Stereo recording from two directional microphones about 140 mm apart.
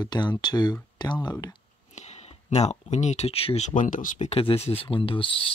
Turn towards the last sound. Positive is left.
turn(degrees=40)  # may be behind; listen again after turning